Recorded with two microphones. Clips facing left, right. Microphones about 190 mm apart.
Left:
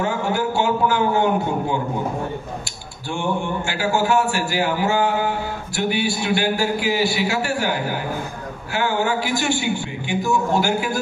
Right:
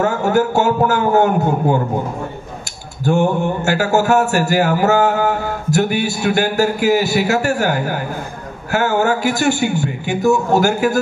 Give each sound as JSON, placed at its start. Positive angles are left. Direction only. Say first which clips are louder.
{"t": 0.0, "sound": "a man's voice", "louder": "right 6 dB", "side_deg": -45}
{"t": 3.1, "sound": "a man's voice", "louder": "right 8 dB", "side_deg": -45}